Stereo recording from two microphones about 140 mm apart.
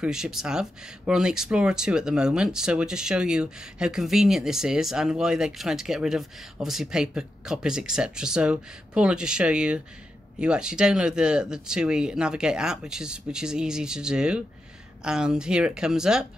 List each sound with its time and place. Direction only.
0.0 s speech: 5° right (ahead or behind)